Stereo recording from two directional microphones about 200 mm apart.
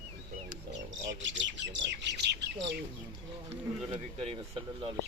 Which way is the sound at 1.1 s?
65° right (ahead or behind).